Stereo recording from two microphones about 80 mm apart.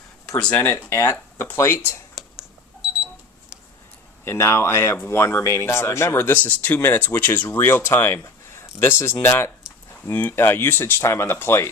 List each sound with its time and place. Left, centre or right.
0.5 s speech: left
2.2 s a sound: centre
4.2 s speech: left
10.1 s speech: left